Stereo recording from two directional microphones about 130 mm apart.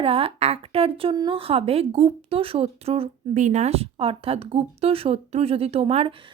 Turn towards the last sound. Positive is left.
turn(degrees=-50)  # may be behind; listen again after turning